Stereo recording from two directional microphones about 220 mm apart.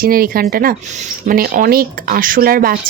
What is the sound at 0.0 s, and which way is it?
Speech, 40° right (ahead or behind).